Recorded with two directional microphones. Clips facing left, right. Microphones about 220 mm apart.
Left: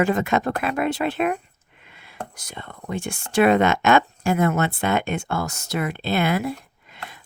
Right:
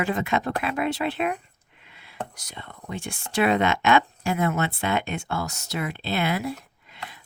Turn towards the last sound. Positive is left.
turn(degrees=50)  # may be behind; listen again after turning